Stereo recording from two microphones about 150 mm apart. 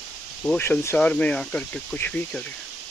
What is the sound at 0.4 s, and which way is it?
Speech, 10° left (ahead or behind).